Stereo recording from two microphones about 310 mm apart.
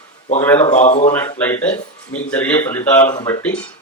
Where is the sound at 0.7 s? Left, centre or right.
Left.